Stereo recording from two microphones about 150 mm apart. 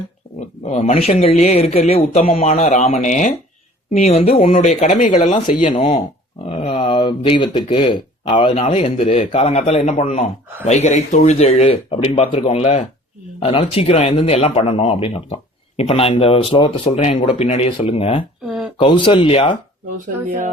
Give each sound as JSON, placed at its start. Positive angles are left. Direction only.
{"t": 0.3, "sound": "speech", "side_deg": 50}
{"t": 3.9, "sound": "speech", "side_deg": 45}